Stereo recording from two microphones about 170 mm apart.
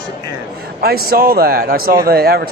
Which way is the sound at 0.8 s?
65° right (ahead or behind).